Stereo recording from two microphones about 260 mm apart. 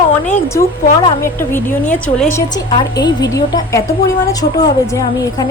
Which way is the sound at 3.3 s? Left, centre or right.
Centre.